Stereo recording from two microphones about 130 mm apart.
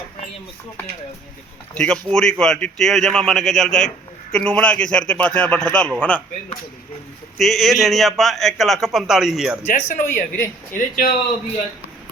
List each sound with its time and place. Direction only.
1.7 s a man's voice: 10° left (ahead or behind)
7.3 s a man's voice: centre (ahead or behind)
9.6 s speech: 80° left